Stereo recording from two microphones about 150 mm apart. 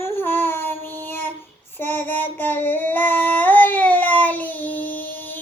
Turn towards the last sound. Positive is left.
turn(degrees=10)  # may be behind; listen again after turning